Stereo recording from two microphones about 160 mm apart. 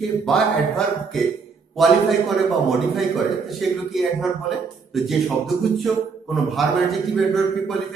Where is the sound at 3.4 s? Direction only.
Centre (ahead or behind).